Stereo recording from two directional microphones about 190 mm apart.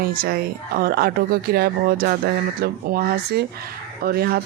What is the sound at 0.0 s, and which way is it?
A woman's voice, 50° right (ahead or behind).